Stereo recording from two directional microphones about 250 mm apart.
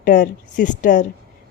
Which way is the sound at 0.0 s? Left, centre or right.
Left.